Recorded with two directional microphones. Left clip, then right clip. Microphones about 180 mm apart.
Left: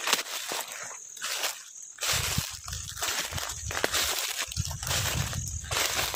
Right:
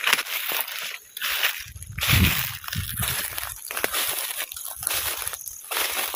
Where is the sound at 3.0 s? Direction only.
15° right (ahead or behind).